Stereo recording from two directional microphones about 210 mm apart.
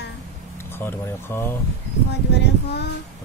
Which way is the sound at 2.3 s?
55° left (ahead or behind).